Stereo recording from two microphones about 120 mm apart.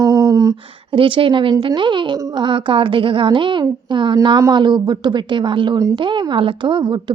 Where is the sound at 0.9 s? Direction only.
45° right (ahead or behind).